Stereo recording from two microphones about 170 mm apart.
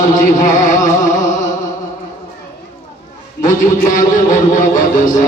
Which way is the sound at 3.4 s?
45° left (ahead or behind).